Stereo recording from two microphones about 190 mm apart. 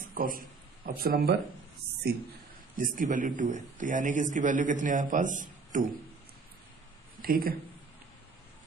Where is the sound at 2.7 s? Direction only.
45° right (ahead or behind).